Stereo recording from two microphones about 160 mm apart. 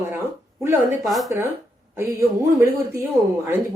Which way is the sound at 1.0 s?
Centre (ahead or behind).